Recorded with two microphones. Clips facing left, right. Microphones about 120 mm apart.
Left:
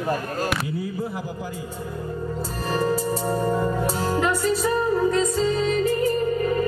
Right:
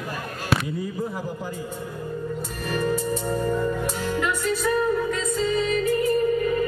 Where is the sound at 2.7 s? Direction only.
30° left (ahead or behind).